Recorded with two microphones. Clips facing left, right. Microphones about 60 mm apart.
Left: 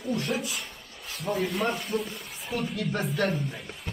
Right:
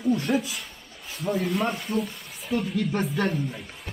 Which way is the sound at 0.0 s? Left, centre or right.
Centre.